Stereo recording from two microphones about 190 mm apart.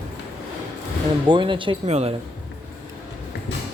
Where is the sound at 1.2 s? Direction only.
25° right (ahead or behind).